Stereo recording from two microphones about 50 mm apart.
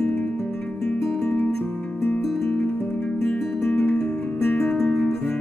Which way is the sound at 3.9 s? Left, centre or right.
Centre.